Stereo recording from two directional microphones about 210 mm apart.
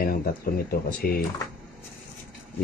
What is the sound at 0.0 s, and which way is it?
Speech, 45° left (ahead or behind).